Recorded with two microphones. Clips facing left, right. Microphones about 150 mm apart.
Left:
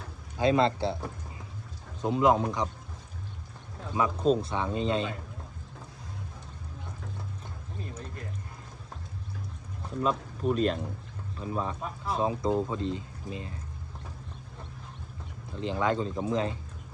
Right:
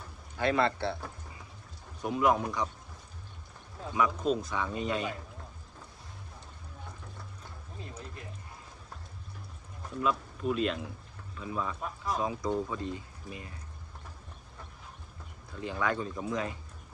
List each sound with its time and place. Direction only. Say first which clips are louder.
0.3 s speech: left 4 dB; 20° left (ahead or behind)
3.9 s speech: left 3 dB; 30° left (ahead or behind)
10.0 s speech: left 2 dB; 35° left (ahead or behind)
15.5 s speech: left 4 dB; 20° left (ahead or behind)